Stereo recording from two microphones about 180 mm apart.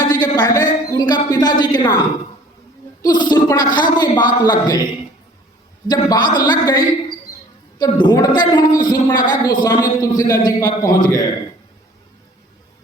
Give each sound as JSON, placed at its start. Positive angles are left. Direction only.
{"t": 0.0, "sound": "a sound", "side_deg": 20}
{"t": 3.0, "sound": "a woman's voice", "side_deg": 25}
{"t": 5.9, "sound": "a woman's voice", "side_deg": 25}